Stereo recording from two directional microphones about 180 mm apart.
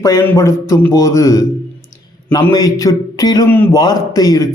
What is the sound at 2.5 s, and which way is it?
A man's voice, 20° left (ahead or behind).